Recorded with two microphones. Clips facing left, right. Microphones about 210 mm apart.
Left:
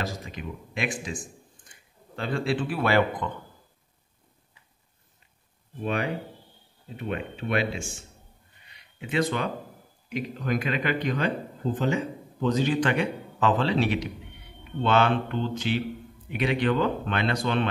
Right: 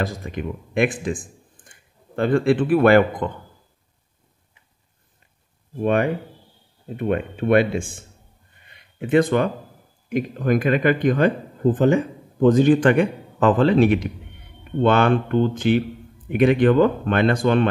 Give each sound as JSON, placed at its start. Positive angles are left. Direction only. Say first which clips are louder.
{"t": 0.0, "sound": "speech", "louder": "right 7 dB", "side_deg": -55}
{"t": 5.8, "sound": "speech", "louder": "right 8 dB", "side_deg": -55}
{"t": 8.6, "sound": "a sound", "louder": "right 10 dB", "side_deg": -50}
{"t": 10.0, "sound": "speech", "louder": "right 8 dB", "side_deg": -50}